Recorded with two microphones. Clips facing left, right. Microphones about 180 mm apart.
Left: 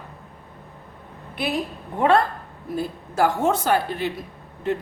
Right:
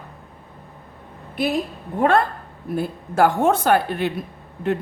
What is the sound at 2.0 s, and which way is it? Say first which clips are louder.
A woman's voice: right 1 dB; 50° right (ahead or behind).